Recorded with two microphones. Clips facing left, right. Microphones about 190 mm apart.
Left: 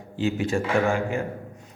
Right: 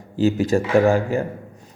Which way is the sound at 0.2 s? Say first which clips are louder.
Right 6 dB; 40° right (ahead or behind).